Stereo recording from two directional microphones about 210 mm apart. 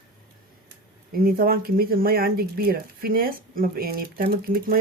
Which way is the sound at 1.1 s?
45° right (ahead or behind).